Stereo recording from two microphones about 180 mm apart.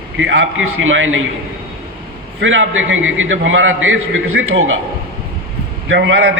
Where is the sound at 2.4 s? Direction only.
90° right.